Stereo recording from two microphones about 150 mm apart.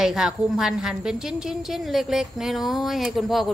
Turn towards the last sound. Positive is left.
turn(degrees=0)  # may be behind; listen again after turning